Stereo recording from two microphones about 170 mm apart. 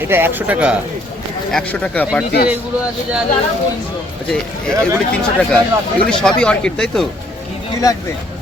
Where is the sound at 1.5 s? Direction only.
10° left (ahead or behind).